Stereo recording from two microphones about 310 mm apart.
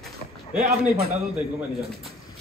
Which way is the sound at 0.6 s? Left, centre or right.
Right.